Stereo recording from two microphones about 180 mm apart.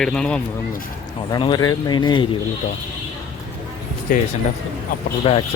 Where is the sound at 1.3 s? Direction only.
25° left (ahead or behind).